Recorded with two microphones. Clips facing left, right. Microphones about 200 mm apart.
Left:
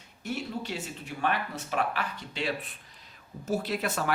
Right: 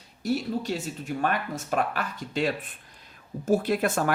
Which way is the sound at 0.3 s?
40° right (ahead or behind).